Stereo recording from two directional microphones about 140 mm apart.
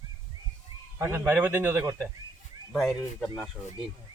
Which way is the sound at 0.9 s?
20° right (ahead or behind).